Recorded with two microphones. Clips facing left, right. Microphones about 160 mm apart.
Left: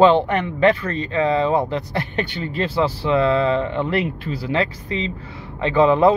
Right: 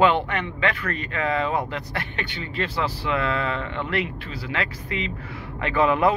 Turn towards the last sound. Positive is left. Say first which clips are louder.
# left 6 dB
turn(degrees=25)  # may be behind; listen again after turning